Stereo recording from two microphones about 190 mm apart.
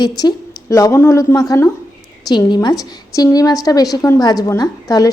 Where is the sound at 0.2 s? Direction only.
20° left (ahead or behind).